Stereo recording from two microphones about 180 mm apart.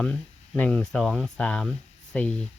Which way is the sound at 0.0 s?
5° left (ahead or behind).